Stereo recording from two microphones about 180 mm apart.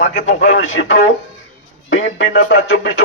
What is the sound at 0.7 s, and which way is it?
Speech, 90° left.